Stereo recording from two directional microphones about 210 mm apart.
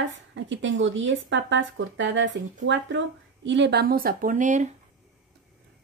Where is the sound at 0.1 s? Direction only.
60° right (ahead or behind); by 4.6 s 35° right (ahead or behind).